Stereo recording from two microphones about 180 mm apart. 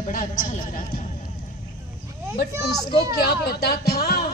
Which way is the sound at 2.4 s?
60° left (ahead or behind).